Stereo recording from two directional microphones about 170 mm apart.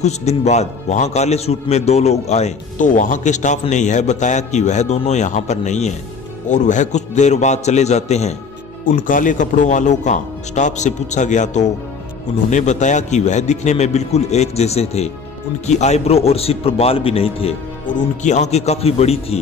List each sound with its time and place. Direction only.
0.0 s a man's voice: 40° left (ahead or behind)
8.8 s a man's voice: 50° left (ahead or behind); by 17.6 s 35° left (ahead or behind)
17.8 s a man's voice: 45° left (ahead or behind)